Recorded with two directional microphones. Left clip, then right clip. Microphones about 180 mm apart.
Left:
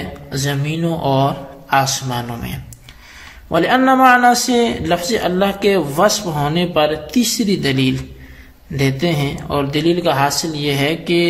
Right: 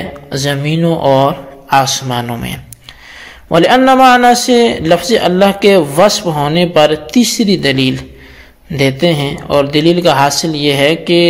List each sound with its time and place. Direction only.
0.3 s a man's voice: 25° right (ahead or behind)